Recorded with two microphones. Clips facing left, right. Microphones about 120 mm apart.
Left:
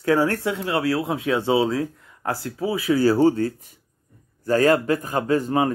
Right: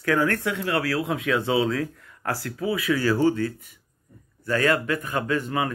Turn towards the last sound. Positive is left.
turn(degrees=35)  # may be behind; listen again after turning